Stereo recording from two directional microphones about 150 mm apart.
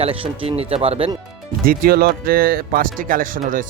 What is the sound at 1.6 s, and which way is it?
Speech, 85° right.